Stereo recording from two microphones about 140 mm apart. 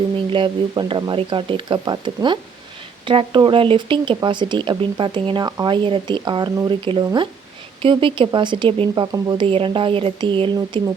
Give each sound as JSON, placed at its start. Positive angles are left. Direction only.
{"t": 0.3, "sound": "speech", "side_deg": -35}